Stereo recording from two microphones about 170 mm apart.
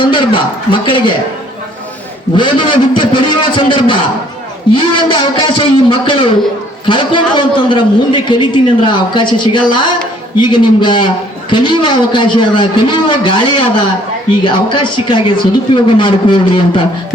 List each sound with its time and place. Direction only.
0.0 s a man's voice: 30° left (ahead or behind)
2.3 s a man's voice: 30° left (ahead or behind)